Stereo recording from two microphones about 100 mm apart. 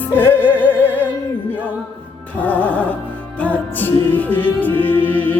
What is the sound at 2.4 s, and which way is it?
Music, 15° left (ahead or behind).